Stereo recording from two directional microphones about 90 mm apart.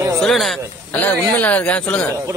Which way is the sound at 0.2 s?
Centre (ahead or behind).